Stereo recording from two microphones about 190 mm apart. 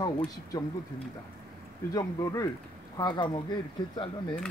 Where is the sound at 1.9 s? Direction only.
20° left (ahead or behind).